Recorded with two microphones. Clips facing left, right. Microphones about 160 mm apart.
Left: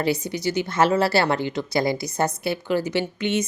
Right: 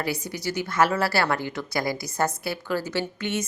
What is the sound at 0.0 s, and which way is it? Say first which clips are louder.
A woman's voice: left 5 dB; 25° left (ahead or behind).